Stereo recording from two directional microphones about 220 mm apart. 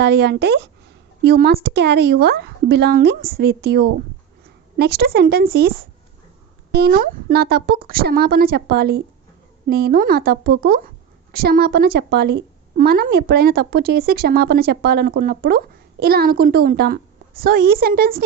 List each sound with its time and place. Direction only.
0.0 s a woman's voice: 50° right (ahead or behind)